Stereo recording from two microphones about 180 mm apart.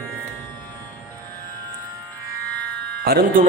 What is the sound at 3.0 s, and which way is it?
Speech, 55° right (ahead or behind).